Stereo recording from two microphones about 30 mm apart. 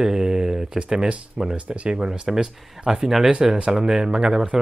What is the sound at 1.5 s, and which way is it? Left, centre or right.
Speech, right.